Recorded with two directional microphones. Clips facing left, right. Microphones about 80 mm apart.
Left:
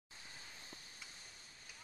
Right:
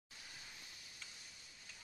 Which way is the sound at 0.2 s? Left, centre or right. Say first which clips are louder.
Left 1 dB; left.